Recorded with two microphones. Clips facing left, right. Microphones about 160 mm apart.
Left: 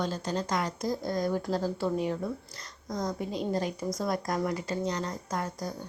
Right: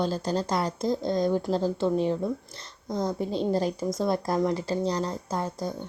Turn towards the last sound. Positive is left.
turn(degrees=-30)  # may be behind; listen again after turning